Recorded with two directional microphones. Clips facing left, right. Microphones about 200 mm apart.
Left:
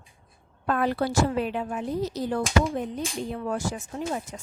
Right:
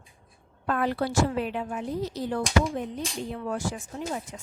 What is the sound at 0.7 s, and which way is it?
A woman's voice, 40° left (ahead or behind).